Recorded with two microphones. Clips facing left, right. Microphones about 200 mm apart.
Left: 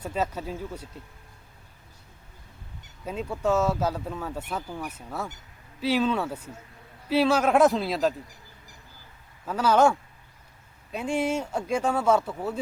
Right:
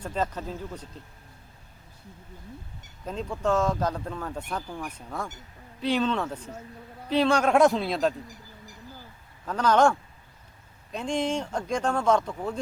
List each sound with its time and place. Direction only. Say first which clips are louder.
0.0 s speech: left 1 dB; 10° left (ahead or behind)
3.1 s a man's voice: left 1 dB; 10° left (ahead or behind)
9.5 s speech: even; 5° left (ahead or behind)